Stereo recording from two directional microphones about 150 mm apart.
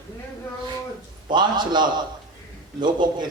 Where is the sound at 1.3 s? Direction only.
30° right (ahead or behind).